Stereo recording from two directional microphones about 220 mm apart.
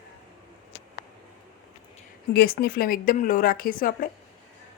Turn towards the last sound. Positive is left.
turn(degrees=40)  # may be behind; listen again after turning